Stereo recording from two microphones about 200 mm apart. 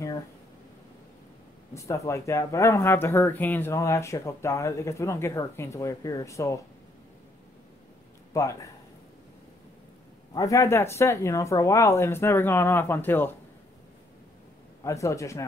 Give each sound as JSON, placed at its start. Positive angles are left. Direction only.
{"t": 1.7, "sound": "speech", "side_deg": 15}
{"t": 8.3, "sound": "a man's voice", "side_deg": 15}
{"t": 10.3, "sound": "speech", "side_deg": 15}
{"t": 14.8, "sound": "speech", "side_deg": 15}